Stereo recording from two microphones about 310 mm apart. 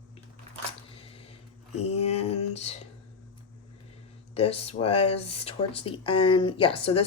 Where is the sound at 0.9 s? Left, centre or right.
Centre.